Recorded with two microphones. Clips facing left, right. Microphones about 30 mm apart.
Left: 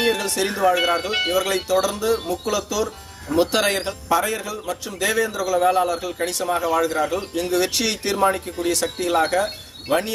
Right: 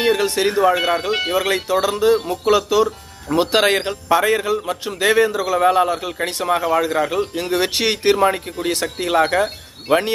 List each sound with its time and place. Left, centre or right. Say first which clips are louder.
0.0 s speech: right 4 dB; centre
1.3 s speech: right 1 dB; right